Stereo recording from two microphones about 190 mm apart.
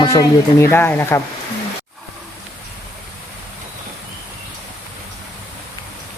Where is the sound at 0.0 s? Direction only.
20° left (ahead or behind).